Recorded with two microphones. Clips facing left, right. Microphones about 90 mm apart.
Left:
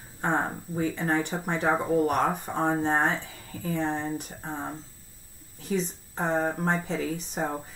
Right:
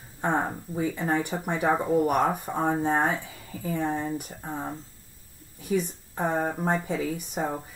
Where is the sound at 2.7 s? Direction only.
20° left (ahead or behind).